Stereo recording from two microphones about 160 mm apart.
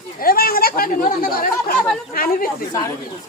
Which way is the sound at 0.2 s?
65° left (ahead or behind).